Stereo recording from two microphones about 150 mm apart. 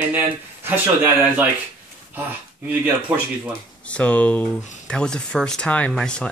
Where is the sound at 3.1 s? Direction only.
10° right (ahead or behind).